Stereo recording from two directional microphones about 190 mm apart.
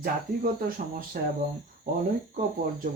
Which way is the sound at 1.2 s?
50° right (ahead or behind).